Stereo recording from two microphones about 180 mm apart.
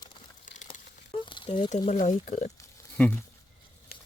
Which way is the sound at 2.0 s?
45° left (ahead or behind).